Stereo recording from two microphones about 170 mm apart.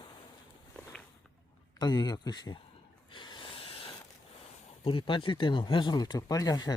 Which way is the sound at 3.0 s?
30° left (ahead or behind).